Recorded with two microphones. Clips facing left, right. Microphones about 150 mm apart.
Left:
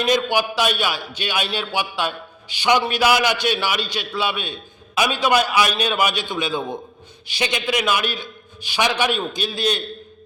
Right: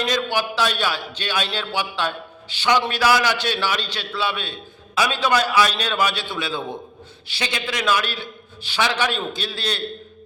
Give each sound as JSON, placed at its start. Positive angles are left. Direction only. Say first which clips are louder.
{"t": 0.0, "sound": "a man's voice", "louder": "left 3 dB", "side_deg": 15}